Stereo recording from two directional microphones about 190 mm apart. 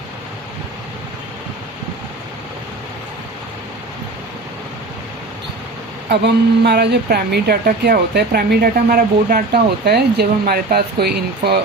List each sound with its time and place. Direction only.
6.1 s speech: 60° right (ahead or behind)